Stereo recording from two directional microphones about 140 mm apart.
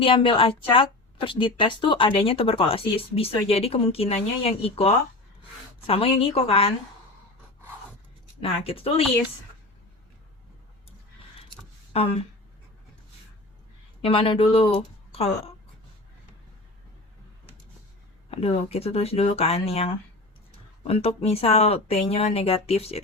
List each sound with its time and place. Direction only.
0.0 s speech: 40° left (ahead or behind)
8.4 s speech: 40° left (ahead or behind)
11.9 s speech: 45° left (ahead or behind)
14.0 s speech: 40° left (ahead or behind)
14.8 s a sound: 45° left (ahead or behind)
18.3 s speech: 45° left (ahead or behind)